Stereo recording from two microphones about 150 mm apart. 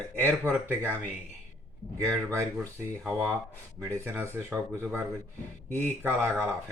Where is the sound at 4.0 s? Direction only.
15° right (ahead or behind).